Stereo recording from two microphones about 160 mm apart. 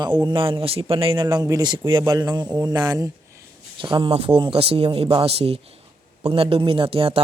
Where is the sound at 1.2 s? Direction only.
20° right (ahead or behind).